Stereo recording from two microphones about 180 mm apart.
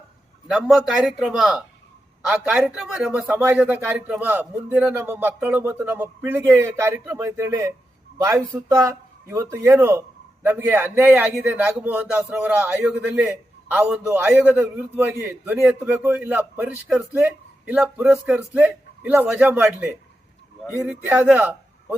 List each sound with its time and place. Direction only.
0.4 s a man's voice: centre (ahead or behind)